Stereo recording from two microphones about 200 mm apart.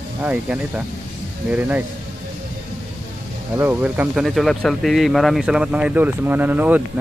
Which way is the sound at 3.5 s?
10° right (ahead or behind).